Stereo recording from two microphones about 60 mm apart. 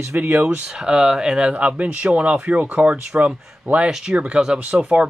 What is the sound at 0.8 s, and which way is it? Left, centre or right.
Speech, centre.